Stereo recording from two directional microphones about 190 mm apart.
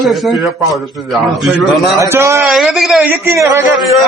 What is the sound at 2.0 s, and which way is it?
Speech, 15° right (ahead or behind).